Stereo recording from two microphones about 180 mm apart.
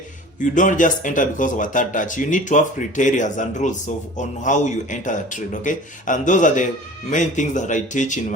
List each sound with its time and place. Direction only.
0.3 s speech: 45° left (ahead or behind)